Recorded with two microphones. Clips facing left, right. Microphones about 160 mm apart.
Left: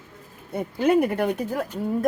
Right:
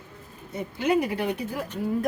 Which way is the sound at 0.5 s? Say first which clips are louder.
Left 4 dB; 55° left (ahead or behind).